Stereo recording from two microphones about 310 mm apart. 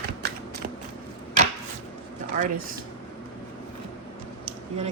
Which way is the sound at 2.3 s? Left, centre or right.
Right.